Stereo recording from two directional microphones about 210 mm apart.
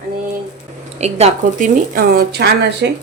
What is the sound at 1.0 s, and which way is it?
Speech, 30° right (ahead or behind).